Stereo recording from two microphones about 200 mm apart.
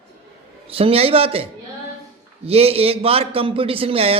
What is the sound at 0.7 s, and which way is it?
Speech, 30° right (ahead or behind).